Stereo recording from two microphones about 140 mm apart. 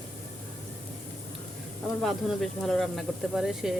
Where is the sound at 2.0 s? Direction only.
Centre (ahead or behind).